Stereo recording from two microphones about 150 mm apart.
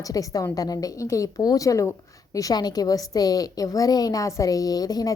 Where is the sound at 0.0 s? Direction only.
25° left (ahead or behind).